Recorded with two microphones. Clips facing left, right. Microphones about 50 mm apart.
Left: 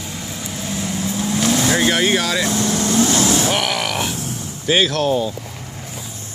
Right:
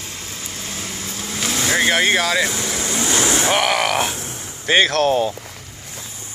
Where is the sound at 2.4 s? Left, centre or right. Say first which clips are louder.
Left 5 dB; centre; by 4.3 s right.